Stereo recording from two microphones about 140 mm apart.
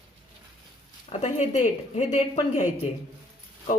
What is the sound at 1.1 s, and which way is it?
A woman's voice, 50° left (ahead or behind).